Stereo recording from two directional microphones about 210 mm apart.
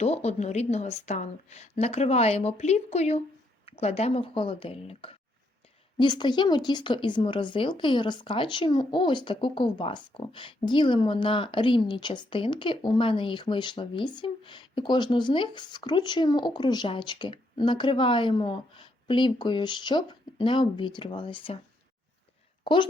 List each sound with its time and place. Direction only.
0.0 s a woman's voice: 30° left (ahead or behind)
22.6 s a woman's voice: 20° left (ahead or behind)